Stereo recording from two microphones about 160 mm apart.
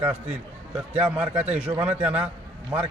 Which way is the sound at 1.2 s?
10° right (ahead or behind).